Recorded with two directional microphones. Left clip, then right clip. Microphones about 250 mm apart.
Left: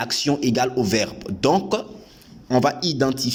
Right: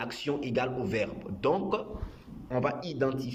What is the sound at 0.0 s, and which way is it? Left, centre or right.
Speech, left.